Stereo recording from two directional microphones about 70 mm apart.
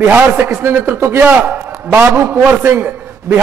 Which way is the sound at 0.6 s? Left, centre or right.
Right.